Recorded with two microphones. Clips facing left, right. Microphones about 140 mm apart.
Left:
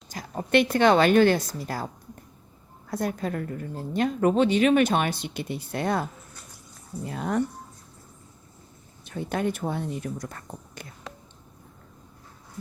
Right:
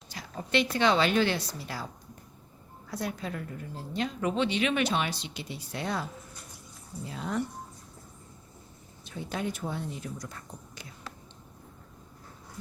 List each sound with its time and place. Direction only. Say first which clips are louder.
0.1 s a woman's voice: left 7 dB; 50° left (ahead or behind)
2.9 s a woman's voice: left 6 dB; 50° left (ahead or behind)
9.0 s speech: left 6 dB; 55° left (ahead or behind)